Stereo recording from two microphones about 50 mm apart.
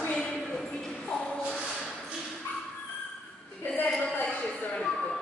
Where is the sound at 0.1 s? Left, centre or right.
Centre.